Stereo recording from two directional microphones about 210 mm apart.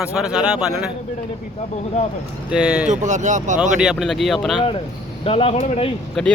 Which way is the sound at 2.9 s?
35° right (ahead or behind).